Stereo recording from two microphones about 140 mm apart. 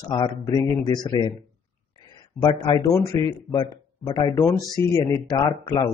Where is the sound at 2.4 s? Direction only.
30° left (ahead or behind).